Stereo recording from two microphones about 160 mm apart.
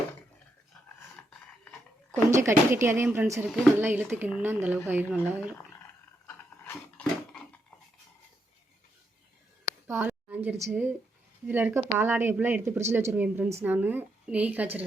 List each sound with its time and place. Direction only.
2.3 s speech: 20° right (ahead or behind)
3.4 s speech: centre (ahead or behind)
3.8 s speech: 15° right (ahead or behind)
6.2 s a sound: 15° left (ahead or behind)
9.8 s a sound: 15° right (ahead or behind)
10.7 s speech: 10° right (ahead or behind)